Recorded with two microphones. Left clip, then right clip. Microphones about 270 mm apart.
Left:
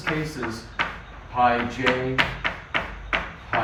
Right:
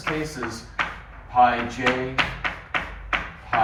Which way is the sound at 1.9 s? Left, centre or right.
Left.